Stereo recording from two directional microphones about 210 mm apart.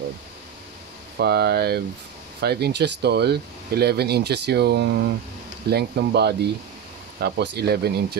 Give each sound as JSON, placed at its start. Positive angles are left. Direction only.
{"t": 1.1, "sound": "speech", "side_deg": -50}